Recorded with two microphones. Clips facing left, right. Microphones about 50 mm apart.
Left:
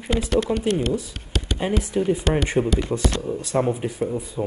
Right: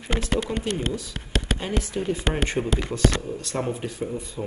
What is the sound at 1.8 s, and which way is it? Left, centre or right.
Speech, centre.